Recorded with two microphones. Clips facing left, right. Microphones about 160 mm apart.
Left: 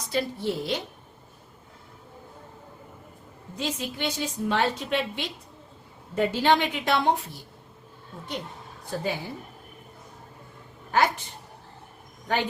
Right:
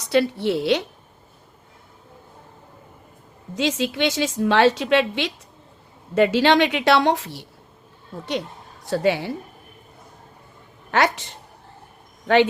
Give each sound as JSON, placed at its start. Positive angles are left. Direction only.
{"t": 0.0, "sound": "a woman's voice", "side_deg": -75}
{"t": 3.5, "sound": "a woman's voice", "side_deg": -90}
{"t": 8.9, "sound": "a woman's voice", "side_deg": -80}
{"t": 10.9, "sound": "a woman's voice", "side_deg": -80}